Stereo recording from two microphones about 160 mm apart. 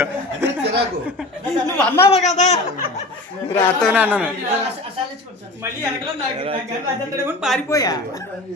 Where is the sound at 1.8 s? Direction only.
5° left (ahead or behind).